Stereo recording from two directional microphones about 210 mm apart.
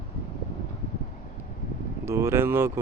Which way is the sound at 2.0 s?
10° right (ahead or behind).